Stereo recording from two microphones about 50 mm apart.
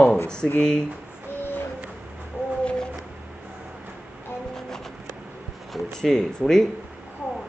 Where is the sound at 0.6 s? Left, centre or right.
Centre.